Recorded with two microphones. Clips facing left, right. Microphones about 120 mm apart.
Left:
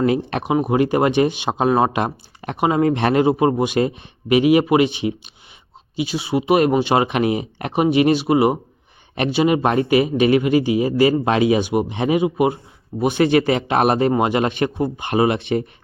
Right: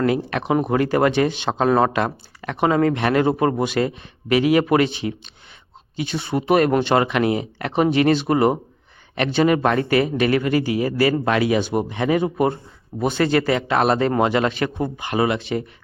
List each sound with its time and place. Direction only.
0.0 s speech: 25° left (ahead or behind)
0.4 s speech: 10° left (ahead or behind)
3.2 s speech: 15° left (ahead or behind)